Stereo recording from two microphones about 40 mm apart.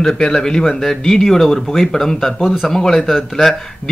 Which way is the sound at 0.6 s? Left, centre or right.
Centre.